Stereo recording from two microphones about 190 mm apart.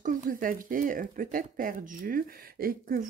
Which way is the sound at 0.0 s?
45° right (ahead or behind).